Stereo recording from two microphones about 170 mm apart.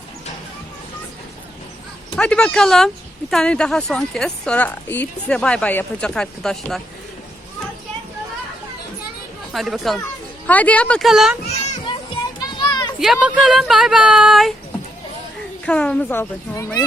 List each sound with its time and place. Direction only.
2.1 s speech: 5° left (ahead or behind)
9.5 s a woman's voice: centre (ahead or behind)
12.4 s children playing: 25° left (ahead or behind)
13.0 s speech: centre (ahead or behind)
15.6 s a woman's voice: 5° left (ahead or behind)